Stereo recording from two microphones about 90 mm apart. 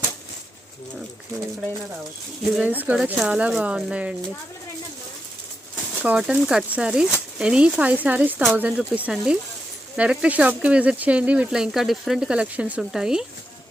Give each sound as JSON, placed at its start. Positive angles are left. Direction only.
{"t": 2.6, "sound": "speech", "side_deg": -20}
{"t": 6.0, "sound": "speech", "side_deg": -15}